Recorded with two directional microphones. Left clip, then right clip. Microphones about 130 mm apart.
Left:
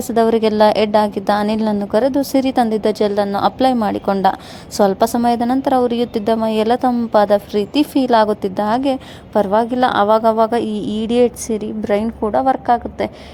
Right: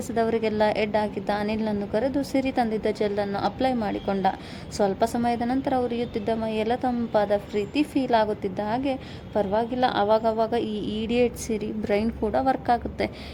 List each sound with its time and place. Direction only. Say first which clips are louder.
0.1 s a woman's voice: left 10 dB; 50° left (ahead or behind); by 13.1 s 20° left (ahead or behind)